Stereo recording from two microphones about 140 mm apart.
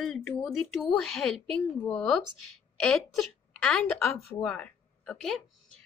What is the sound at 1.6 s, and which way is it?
A woman's voice, 10° left (ahead or behind).